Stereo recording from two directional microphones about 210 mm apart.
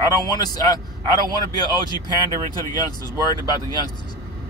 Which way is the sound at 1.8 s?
20° left (ahead or behind).